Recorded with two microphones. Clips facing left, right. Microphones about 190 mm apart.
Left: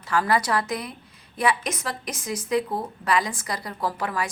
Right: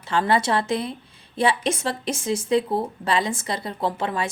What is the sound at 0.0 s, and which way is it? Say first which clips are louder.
A woman's voice: right 2 dB; 25° right (ahead or behind).